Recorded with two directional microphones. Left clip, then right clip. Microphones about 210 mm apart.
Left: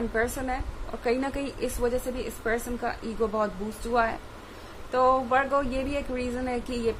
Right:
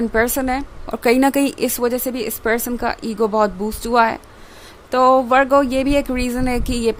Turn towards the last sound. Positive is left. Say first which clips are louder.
# right 9 dB
turn(degrees=-55)  # may be behind; listen again after turning